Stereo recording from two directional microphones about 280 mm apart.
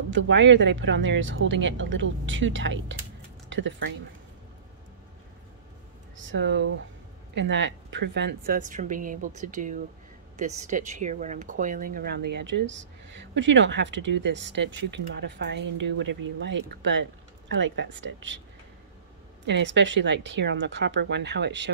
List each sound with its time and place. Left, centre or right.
0.1 s speech: right
6.1 s a woman's voice: right
19.4 s speech: right